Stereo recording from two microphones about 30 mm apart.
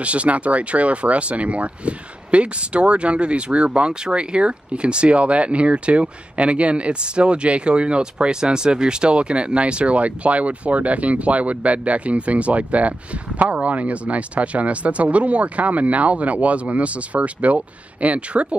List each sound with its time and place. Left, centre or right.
0.0 s speech: right